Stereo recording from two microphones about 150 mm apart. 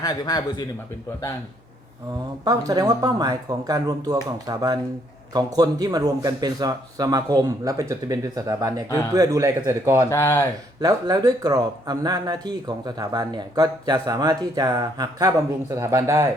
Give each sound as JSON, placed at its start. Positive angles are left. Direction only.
{"t": 0.0, "sound": "a man's voice", "side_deg": 25}
{"t": 2.4, "sound": "speech", "side_deg": -25}
{"t": 10.1, "sound": "a man's voice", "side_deg": 20}
{"t": 10.8, "sound": "speech", "side_deg": -25}